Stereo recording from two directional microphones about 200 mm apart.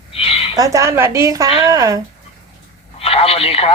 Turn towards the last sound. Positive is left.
turn(degrees=30)  # may be behind; listen again after turning